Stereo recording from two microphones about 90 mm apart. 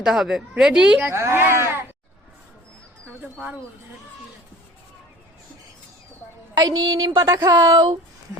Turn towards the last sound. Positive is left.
turn(degrees=-50)  # may be behind; listen again after turning